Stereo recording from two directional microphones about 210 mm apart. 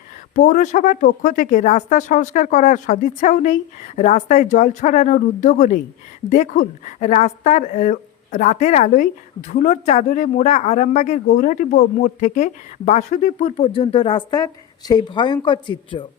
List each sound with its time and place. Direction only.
0.3 s speech: 35° left (ahead or behind)